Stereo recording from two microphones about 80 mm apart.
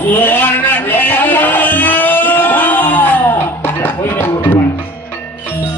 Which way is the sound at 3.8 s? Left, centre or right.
Left.